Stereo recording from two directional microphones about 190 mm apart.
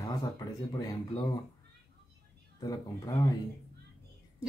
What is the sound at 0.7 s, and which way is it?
Speech, 20° left (ahead or behind).